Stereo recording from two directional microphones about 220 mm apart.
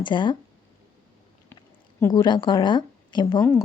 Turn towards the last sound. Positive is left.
turn(degrees=20)  # may be behind; listen again after turning